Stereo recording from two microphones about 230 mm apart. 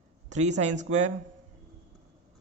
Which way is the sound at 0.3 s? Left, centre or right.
Right.